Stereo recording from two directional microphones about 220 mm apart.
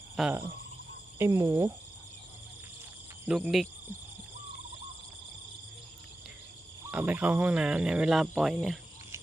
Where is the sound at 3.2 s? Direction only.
5° right (ahead or behind).